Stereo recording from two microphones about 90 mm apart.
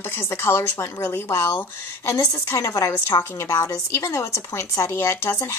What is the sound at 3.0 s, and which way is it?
A woman's voice, 25° left (ahead or behind).